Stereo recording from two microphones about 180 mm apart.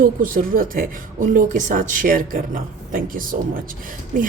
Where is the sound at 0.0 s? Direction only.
50° right (ahead or behind).